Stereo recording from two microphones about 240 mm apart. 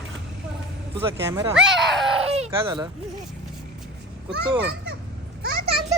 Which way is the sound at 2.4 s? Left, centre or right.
Centre.